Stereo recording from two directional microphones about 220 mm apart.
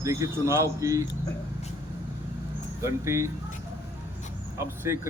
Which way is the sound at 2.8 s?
10° right (ahead or behind).